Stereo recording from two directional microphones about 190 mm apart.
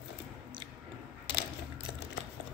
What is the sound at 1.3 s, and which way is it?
Coin, 70° left (ahead or behind).